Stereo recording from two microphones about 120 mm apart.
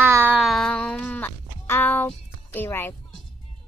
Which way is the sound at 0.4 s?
5° left (ahead or behind).